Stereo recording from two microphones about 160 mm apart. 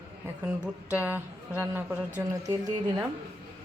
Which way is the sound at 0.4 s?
10° right (ahead or behind).